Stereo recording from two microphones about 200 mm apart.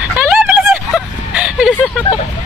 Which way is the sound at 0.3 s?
5° right (ahead or behind).